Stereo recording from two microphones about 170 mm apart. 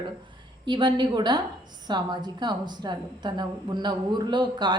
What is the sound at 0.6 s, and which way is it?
A woman's voice, 25° right (ahead or behind).